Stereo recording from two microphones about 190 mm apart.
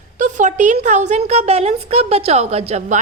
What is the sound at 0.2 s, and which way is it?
A woman's voice, 40° right (ahead or behind).